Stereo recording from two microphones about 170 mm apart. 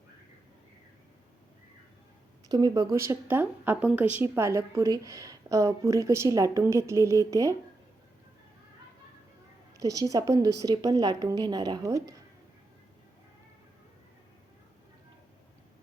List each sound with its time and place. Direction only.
2.5 s a woman's voice: 20° right (ahead or behind)
9.7 s a woman's voice: 20° right (ahead or behind)